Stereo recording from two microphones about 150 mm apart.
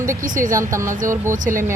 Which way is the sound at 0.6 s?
20° right (ahead or behind).